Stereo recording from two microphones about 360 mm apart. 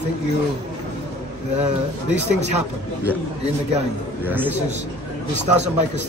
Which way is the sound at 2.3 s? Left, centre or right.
Centre.